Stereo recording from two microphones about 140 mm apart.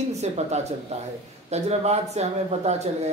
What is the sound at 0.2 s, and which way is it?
A man's voice, 50° right (ahead or behind).